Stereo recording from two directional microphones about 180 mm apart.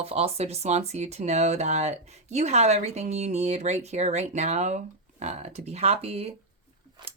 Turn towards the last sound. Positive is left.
turn(degrees=-35)  # may be behind; listen again after turning